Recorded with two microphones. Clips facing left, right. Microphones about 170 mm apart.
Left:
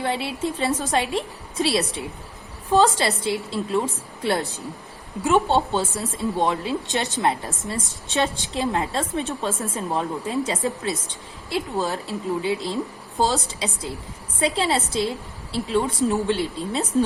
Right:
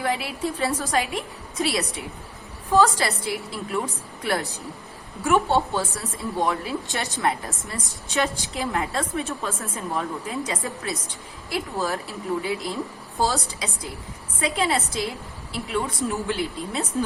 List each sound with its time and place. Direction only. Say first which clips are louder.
0.0 s a woman's voice: left 1 dB; 25° left (ahead or behind)